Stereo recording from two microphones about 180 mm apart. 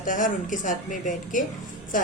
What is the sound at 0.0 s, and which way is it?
A woman's voice, 45° left (ahead or behind).